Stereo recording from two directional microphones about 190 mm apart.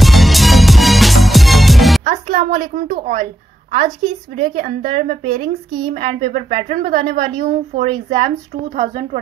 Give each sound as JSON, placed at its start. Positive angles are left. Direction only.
{"t": 0.0, "sound": "music", "side_deg": 0}
{"t": 2.0, "sound": "a woman's voice", "side_deg": -45}
{"t": 4.4, "sound": "a woman's voice", "side_deg": -45}